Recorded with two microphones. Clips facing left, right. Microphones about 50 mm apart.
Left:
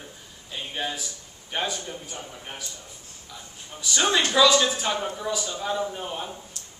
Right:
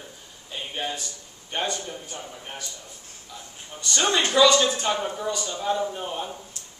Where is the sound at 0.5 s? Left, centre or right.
Centre.